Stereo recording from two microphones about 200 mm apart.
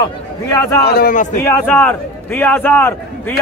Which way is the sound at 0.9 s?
45° left (ahead or behind).